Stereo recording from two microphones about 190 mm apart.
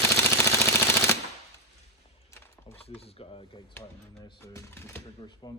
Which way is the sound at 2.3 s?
10° left (ahead or behind).